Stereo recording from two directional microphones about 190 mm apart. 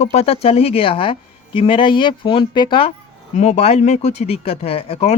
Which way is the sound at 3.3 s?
35° left (ahead or behind).